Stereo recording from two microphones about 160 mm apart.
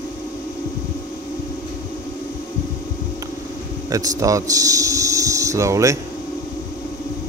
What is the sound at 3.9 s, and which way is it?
Speech, 20° right (ahead or behind).